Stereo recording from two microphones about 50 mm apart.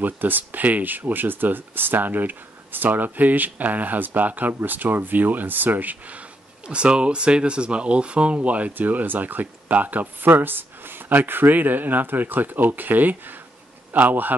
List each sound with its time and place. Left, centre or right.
0.0 s speech: right
6.7 s speech: right